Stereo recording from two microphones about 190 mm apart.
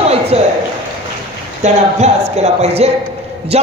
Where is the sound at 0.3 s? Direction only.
35° right (ahead or behind).